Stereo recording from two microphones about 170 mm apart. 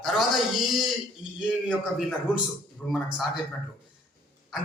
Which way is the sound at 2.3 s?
5° right (ahead or behind).